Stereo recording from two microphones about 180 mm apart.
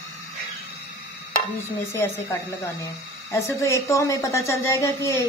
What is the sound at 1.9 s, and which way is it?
Speech, 15° left (ahead or behind).